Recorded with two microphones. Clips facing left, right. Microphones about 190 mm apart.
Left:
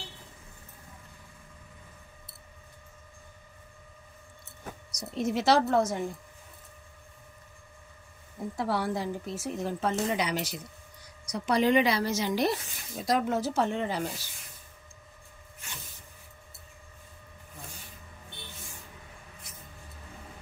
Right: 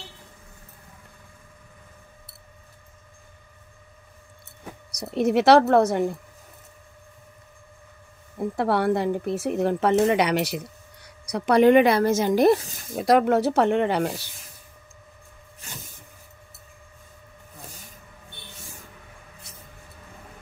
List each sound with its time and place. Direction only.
4.9 s speech: 65° right (ahead or behind)
8.4 s speech: 60° right (ahead or behind)
12.5 s speech: 40° right (ahead or behind)
12.9 s speech: 65° right (ahead or behind)